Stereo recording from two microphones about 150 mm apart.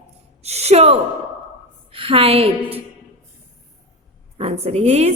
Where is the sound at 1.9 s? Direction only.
40° right (ahead or behind).